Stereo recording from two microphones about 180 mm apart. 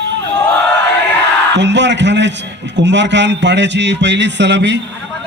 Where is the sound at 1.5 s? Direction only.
80° right.